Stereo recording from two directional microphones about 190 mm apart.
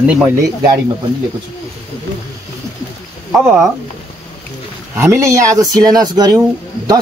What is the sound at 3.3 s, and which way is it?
Speech, 10° right (ahead or behind).